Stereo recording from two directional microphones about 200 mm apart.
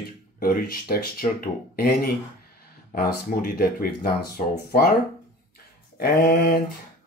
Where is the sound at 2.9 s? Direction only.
45° left (ahead or behind).